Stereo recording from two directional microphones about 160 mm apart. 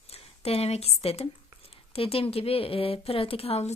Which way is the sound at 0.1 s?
40° left (ahead or behind).